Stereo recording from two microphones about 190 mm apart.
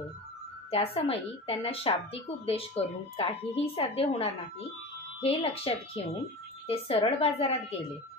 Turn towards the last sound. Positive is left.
turn(degrees=30)  # may be behind; listen again after turning